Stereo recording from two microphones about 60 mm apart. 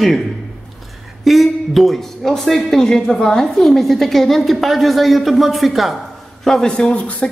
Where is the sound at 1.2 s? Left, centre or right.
Centre.